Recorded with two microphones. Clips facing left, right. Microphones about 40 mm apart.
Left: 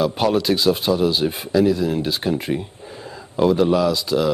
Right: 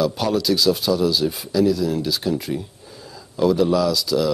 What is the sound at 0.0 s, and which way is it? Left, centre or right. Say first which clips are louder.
Speech: left 2 dB; left.